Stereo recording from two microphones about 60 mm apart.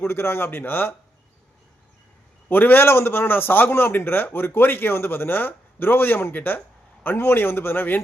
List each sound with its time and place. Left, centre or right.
0.0 s a man's voice: left
2.5 s a man's voice: left